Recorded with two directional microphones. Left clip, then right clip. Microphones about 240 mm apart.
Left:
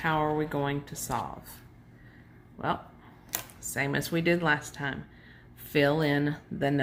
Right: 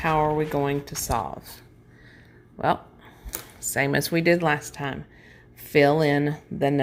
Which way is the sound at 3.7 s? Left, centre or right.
Right.